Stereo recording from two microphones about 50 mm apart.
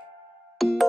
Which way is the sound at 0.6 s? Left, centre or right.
Centre.